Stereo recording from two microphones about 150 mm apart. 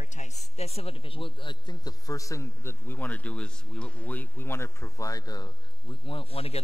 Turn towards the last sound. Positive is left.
turn(degrees=40)  # may be behind; listen again after turning